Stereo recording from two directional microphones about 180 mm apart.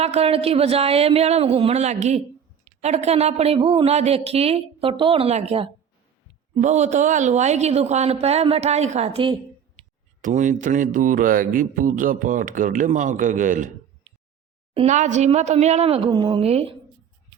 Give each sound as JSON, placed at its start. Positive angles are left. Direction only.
{"t": 0.0, "sound": "a woman's voice", "side_deg": -35}
{"t": 10.2, "sound": "a sound", "side_deg": -45}
{"t": 14.7, "sound": "a woman's voice", "side_deg": -35}